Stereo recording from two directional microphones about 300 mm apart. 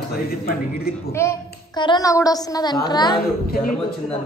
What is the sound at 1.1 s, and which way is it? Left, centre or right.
A woman's voice, centre.